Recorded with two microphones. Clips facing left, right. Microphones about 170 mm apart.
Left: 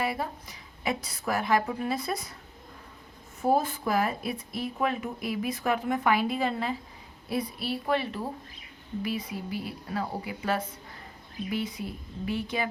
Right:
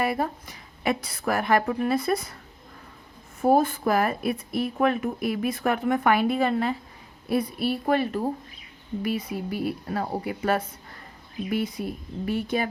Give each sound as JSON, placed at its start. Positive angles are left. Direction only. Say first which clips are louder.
{"t": 0.0, "sound": "speech", "louder": "right 5 dB", "side_deg": -50}
{"t": 3.4, "sound": "speech", "louder": "right 5 dB", "side_deg": -55}
{"t": 11.8, "sound": "speech", "louder": "right 5 dB", "side_deg": -50}